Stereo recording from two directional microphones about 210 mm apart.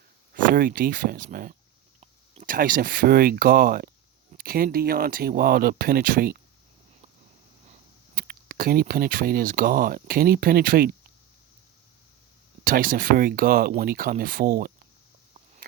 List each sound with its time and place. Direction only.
0.5 s speech: 45° right (ahead or behind)
2.0 s clicking: 30° right (ahead or behind)
2.5 s speech: 40° right (ahead or behind)
8.1 s speech: 45° right (ahead or behind)
12.6 s speech: 40° right (ahead or behind)